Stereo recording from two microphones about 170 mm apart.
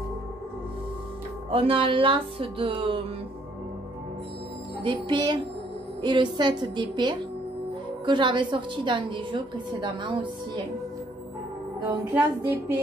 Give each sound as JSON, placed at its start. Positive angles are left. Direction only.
{"t": 1.5, "sound": "speech", "side_deg": -30}
{"t": 4.8, "sound": "a woman's voice", "side_deg": -25}
{"t": 11.9, "sound": "music", "side_deg": -15}